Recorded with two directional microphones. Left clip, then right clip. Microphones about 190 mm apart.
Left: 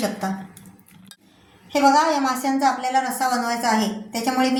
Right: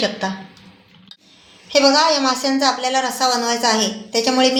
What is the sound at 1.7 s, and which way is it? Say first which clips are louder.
A woman's voice: right 3 dB; 35° right (ahead or behind).